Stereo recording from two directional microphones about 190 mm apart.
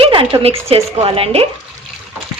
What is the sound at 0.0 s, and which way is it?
A woman's voice, 30° right (ahead or behind).